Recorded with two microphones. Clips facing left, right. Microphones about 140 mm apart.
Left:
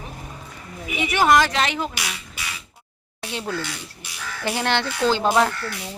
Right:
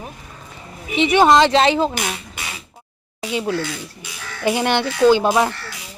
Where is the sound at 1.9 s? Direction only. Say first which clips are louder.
Right 7 dB; 50° right (ahead or behind).